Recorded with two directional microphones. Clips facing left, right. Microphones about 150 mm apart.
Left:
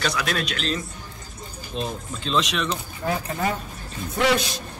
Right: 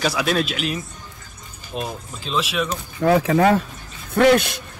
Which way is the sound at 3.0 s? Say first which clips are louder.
Right 11 dB; 85° right.